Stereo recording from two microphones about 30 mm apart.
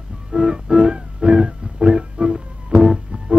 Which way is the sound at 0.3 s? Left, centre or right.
Right.